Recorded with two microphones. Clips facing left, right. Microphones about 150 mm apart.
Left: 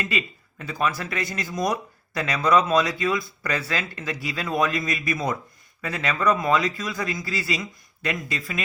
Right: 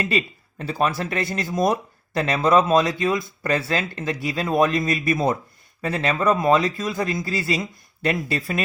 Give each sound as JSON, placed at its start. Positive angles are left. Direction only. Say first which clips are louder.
{"t": 0.0, "sound": "speech", "louder": "right 5 dB", "side_deg": -35}